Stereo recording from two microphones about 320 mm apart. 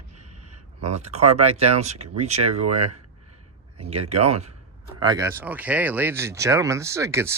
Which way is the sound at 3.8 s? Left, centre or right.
Centre.